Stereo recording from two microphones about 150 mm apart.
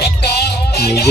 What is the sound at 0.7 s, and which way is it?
Music, 90° left.